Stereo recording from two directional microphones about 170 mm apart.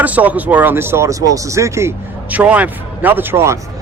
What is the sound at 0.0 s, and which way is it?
Speech, 10° right (ahead or behind).